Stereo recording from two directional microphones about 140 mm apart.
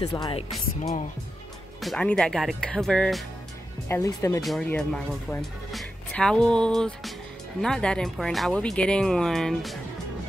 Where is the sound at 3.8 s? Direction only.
20° left (ahead or behind).